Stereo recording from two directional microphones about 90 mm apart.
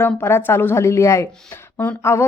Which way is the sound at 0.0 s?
25° left (ahead or behind).